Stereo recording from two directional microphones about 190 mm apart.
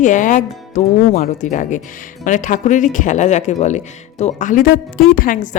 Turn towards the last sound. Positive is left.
turn(degrees=45)  # may be behind; listen again after turning